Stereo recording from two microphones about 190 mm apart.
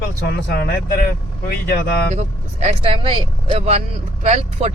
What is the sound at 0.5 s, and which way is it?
Speech, 55° left (ahead or behind).